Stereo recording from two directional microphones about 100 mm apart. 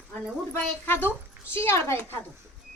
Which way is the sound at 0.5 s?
20° left (ahead or behind).